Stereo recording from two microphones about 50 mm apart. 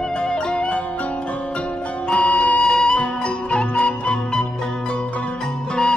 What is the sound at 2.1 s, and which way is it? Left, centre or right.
Music, left.